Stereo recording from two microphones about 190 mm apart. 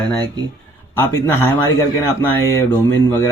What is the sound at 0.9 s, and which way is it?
Speech, 15° left (ahead or behind).